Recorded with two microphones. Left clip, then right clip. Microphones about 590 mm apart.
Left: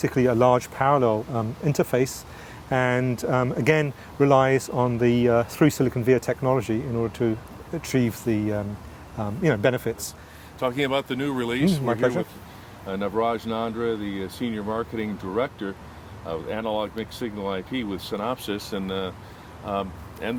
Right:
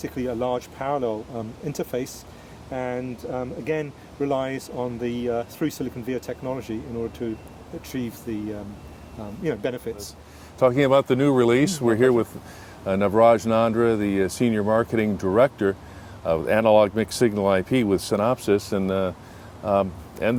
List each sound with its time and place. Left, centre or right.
0.0 s a man's voice: left
10.6 s speech: right